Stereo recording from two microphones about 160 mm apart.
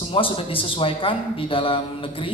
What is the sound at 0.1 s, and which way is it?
A man's voice, 35° left (ahead or behind).